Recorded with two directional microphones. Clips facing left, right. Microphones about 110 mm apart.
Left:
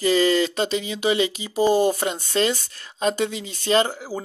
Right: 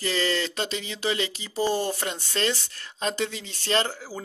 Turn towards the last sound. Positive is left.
turn(degrees=15)  # may be behind; listen again after turning